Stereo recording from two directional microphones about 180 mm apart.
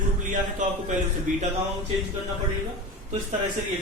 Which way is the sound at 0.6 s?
45° right (ahead or behind).